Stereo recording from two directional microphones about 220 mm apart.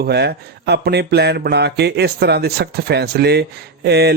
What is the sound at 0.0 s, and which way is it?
Speech, 50° right (ahead or behind).